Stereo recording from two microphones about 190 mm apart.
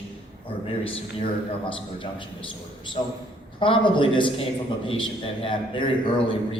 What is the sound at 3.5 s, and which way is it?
A man's voice, 25° left (ahead or behind).